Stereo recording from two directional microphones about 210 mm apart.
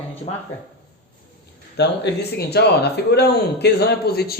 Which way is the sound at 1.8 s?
55° left (ahead or behind).